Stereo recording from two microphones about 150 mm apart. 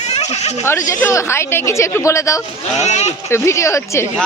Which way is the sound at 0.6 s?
20° left (ahead or behind).